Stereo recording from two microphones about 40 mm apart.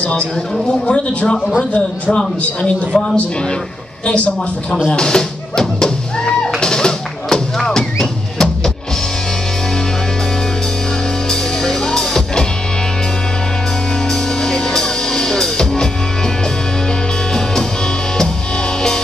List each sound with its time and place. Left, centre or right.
0.0 s a woman's voice: left
4.0 s a woman's voice: left
4.8 s music: centre
11.2 s music: centre
14.0 s music: centre